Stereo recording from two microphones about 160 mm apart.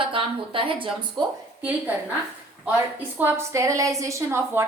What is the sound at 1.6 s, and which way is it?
A woman's voice, 10° right (ahead or behind).